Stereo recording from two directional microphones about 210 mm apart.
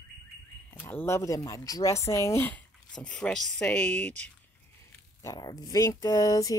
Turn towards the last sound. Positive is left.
turn(degrees=15)  # may be behind; listen again after turning